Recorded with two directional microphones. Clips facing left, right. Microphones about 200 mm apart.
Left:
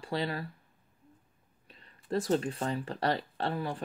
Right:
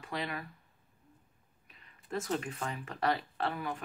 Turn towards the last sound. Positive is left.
turn(degrees=35)  # may be behind; listen again after turning